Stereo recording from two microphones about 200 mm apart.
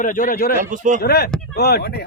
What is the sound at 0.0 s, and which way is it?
Speech, 40° left (ahead or behind).